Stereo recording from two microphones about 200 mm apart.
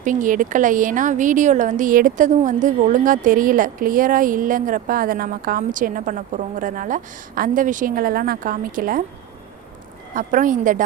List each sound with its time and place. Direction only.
0.0 s a woman's voice: 40° right (ahead or behind)
10.2 s a woman's voice: 40° right (ahead or behind)